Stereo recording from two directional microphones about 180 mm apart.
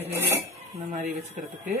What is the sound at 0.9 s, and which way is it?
Speech, 45° right (ahead or behind).